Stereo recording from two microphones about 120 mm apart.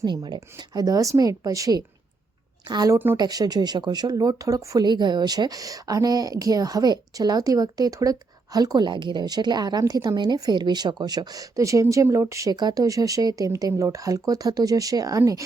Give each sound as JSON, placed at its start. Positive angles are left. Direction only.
{"t": 0.0, "sound": "a woman's voice", "side_deg": -35}